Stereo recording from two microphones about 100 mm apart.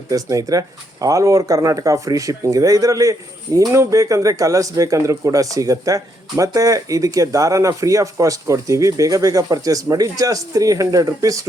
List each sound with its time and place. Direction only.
0.1 s speech: 35° right (ahead or behind)